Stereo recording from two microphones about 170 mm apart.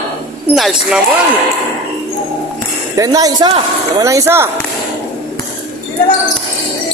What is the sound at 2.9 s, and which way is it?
Speech, 20° right (ahead or behind).